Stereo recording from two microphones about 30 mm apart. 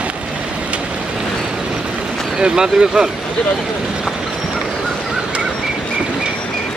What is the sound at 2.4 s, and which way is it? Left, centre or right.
Speech, right.